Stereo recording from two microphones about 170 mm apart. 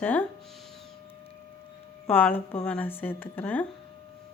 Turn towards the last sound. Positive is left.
turn(degrees=10)  # may be behind; listen again after turning